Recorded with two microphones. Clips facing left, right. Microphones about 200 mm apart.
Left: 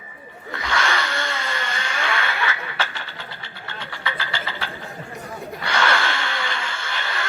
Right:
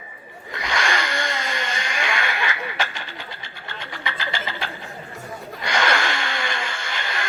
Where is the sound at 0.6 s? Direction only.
15° right (ahead or behind).